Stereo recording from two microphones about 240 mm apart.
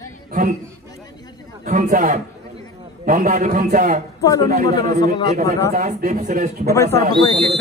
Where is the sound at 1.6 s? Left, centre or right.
Right.